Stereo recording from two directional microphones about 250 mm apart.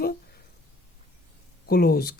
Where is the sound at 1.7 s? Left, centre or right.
Left.